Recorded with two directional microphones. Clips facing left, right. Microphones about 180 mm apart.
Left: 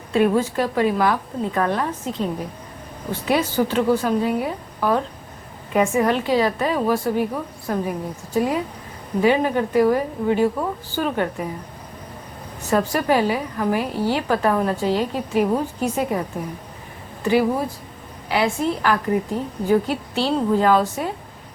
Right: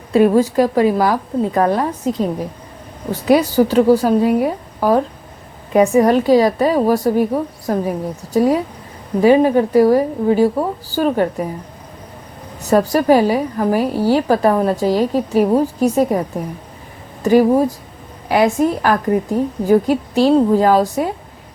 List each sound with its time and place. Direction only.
0.1 s a woman's voice: 40° right (ahead or behind)
12.7 s a woman's voice: 40° right (ahead or behind)
17.2 s a woman's voice: 40° right (ahead or behind)